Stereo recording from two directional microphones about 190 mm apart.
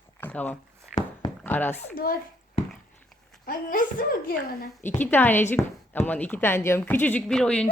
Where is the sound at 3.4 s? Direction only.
45° left (ahead or behind).